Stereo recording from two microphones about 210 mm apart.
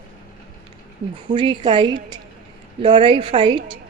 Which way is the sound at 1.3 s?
25° right (ahead or behind).